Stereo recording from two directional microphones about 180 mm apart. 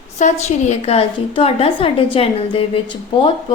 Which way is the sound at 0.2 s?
40° left (ahead or behind).